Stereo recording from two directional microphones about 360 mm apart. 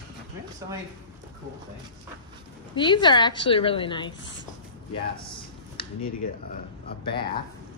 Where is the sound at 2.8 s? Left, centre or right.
Centre.